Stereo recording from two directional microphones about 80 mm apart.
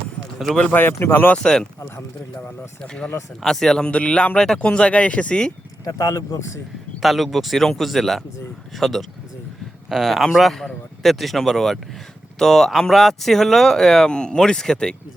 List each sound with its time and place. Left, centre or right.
0.7 s speech: left
1.3 s speech: centre
2.8 s speech: centre
5.8 s a man's voice: left
7.0 s speech: centre